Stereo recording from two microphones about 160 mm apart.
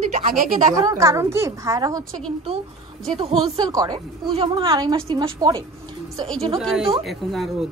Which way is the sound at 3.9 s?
35° right (ahead or behind).